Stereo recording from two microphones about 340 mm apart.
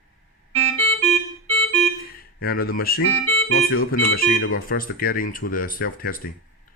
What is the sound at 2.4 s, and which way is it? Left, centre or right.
Speech, left.